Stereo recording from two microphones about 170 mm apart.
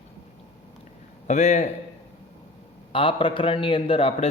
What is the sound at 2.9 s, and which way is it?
A man's voice, 30° left (ahead or behind).